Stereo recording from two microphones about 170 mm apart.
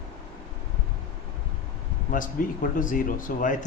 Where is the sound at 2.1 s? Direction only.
55° left (ahead or behind).